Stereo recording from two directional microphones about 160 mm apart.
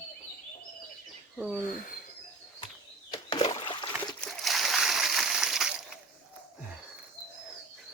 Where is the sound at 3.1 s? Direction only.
30° left (ahead or behind).